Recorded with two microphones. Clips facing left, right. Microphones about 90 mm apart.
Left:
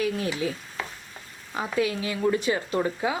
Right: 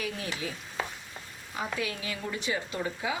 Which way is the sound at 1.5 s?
35° left (ahead or behind).